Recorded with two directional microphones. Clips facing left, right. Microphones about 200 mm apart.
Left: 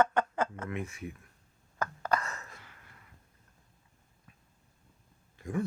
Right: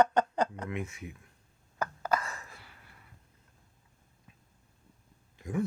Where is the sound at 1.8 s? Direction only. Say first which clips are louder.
Even; 10° right (ahead or behind).